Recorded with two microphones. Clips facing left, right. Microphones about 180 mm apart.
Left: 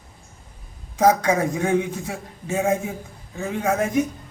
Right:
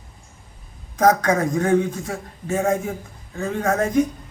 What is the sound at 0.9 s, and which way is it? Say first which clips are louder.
A man's voice: right 1 dB; 10° left (ahead or behind).